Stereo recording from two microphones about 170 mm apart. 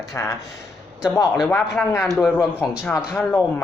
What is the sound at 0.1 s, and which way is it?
Speech, 15° left (ahead or behind).